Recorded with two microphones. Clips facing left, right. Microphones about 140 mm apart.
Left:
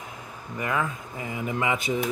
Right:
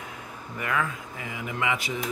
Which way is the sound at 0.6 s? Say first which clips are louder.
Left 1 dB; 25° left (ahead or behind).